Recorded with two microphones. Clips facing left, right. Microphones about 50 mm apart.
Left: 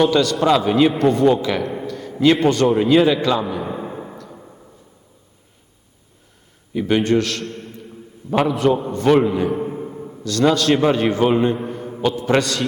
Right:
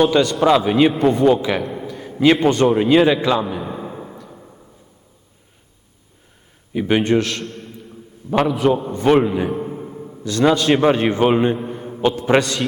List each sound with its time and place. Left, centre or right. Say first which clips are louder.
0.0 s a man's voice: right 1 dB; centre
1.9 s a sound: right 1 dB; centre
2.4 s a man's voice: right 1 dB; centre
3.6 s a sound: left 2 dB; centre
6.7 s a man's voice: even; centre
9.5 s a sound: left 2 dB; centre
10.2 s a man's voice: right 1 dB; centre
10.9 s a man's voice: even; centre
11.2 s a man's voice: right 1 dB; centre